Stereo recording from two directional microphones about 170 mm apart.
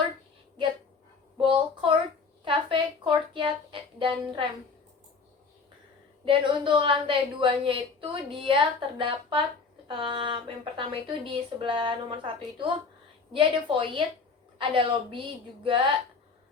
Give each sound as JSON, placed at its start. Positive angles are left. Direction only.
{"t": 1.4, "sound": "a sound", "side_deg": -30}
{"t": 2.4, "sound": "music", "side_deg": -30}
{"t": 6.2, "sound": "a woman's voice", "side_deg": -30}